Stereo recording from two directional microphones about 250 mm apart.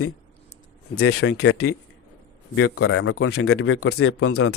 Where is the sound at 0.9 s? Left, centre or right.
Left.